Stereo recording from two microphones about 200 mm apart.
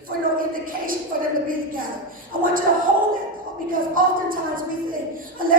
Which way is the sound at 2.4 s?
45° right (ahead or behind).